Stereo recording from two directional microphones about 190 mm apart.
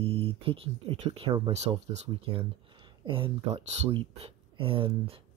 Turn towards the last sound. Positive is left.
turn(degrees=-30)  # may be behind; listen again after turning